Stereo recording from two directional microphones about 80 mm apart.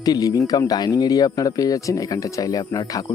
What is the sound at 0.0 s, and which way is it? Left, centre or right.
Speech, left.